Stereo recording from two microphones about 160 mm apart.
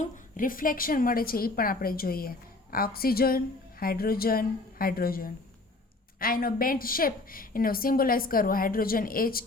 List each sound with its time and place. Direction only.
0.0 s a woman's voice: 60° left (ahead or behind)